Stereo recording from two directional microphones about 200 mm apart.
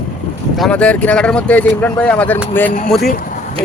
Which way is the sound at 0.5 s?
5° left (ahead or behind).